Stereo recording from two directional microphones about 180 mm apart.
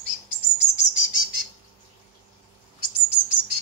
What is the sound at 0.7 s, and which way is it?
Bird vocalization, 90° left.